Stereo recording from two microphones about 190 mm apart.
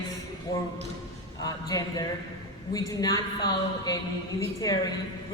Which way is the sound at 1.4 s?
20° left (ahead or behind).